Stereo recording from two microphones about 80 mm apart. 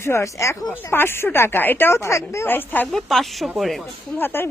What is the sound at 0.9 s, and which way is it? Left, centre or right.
Speech, left.